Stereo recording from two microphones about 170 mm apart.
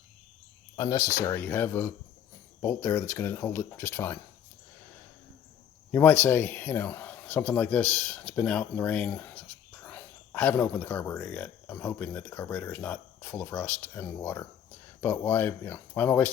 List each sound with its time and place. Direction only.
0.8 s speech: 20° left (ahead or behind)
5.9 s speech: 10° left (ahead or behind)